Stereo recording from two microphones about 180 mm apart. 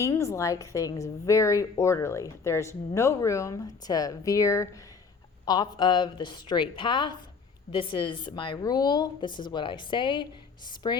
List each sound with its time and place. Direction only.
0.0 s a woman's voice: 15° left (ahead or behind)